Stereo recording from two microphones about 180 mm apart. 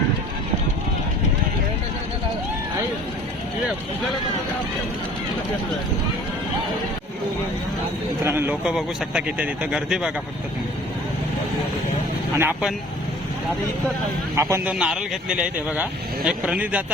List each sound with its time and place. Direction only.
8.2 s speech: 10° right (ahead or behind)
12.4 s speech: 10° right (ahead or behind)
14.3 s speech: 15° right (ahead or behind)